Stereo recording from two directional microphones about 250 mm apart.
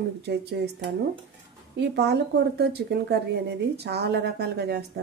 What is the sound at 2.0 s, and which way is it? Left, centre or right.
Speech, right.